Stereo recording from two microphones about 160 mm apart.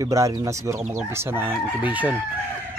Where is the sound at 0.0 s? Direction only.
20° right (ahead or behind).